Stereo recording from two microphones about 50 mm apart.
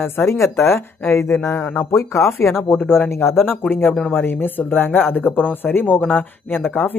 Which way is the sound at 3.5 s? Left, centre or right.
Left.